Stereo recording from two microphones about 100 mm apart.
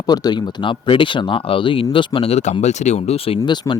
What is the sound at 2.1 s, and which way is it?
Speech, 85° left.